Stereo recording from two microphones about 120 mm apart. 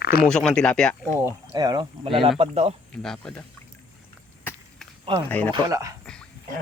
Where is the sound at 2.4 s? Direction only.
55° right (ahead or behind).